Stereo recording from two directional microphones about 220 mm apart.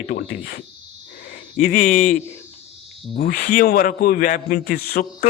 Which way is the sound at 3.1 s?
40° left (ahead or behind).